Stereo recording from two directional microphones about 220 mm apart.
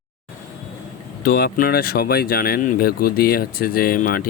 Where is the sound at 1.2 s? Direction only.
45° left (ahead or behind).